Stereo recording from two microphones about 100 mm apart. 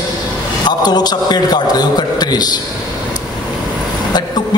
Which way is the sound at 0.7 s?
45° left (ahead or behind).